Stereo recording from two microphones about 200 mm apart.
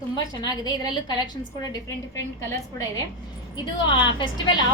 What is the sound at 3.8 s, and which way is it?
Speech, 25° left (ahead or behind).